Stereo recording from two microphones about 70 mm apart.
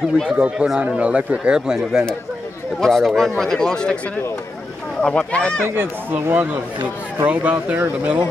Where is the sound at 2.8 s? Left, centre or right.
Centre.